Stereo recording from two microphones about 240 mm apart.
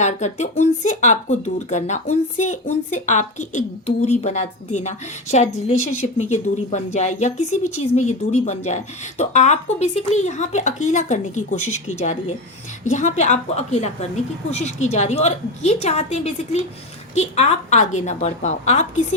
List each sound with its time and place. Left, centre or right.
0.0 s speech: left